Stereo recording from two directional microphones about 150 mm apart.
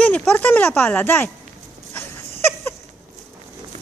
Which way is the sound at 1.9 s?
15° left (ahead or behind).